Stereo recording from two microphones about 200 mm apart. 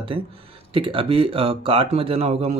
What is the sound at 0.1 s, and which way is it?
Speech, 25° right (ahead or behind).